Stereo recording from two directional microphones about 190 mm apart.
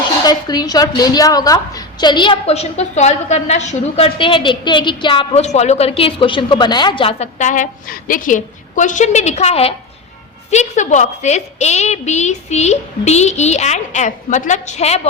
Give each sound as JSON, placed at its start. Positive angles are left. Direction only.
{"t": 0.3, "sound": "a woman's voice", "side_deg": 20}